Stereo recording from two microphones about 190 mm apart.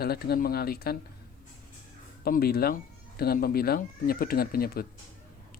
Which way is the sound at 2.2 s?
50° left (ahead or behind).